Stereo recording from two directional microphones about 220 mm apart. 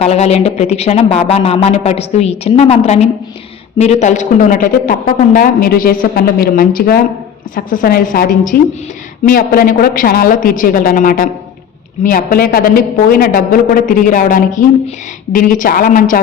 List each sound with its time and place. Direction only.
0.0 s a woman's voice: 30° left (ahead or behind)